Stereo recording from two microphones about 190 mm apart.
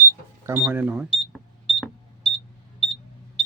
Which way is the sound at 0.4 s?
10° right (ahead or behind).